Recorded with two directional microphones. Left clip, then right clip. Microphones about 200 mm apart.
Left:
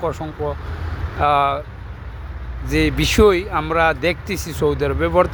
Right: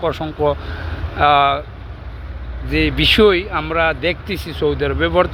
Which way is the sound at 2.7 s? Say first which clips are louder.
Right 4 dB; 15° left (ahead or behind).